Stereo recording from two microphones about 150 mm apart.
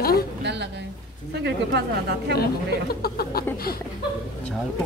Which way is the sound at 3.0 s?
90° left.